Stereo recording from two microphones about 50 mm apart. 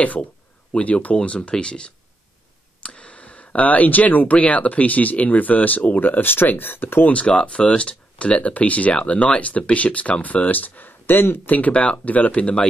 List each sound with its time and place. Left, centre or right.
0.0 s speech: left
7.1 s speech: left
11.4 s speech: left